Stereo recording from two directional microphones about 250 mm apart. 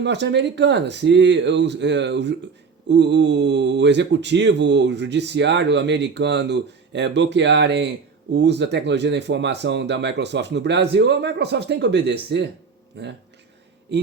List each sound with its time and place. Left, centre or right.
0.0 s speech: right